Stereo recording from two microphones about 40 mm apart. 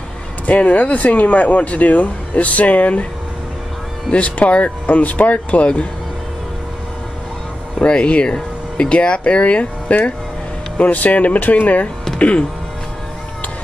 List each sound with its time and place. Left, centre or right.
0.5 s speech: left
4.1 s speech: left
7.8 s speech: left